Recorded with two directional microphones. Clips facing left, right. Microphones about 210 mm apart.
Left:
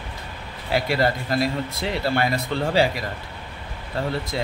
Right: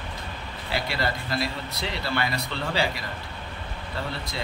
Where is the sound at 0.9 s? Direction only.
45° left (ahead or behind).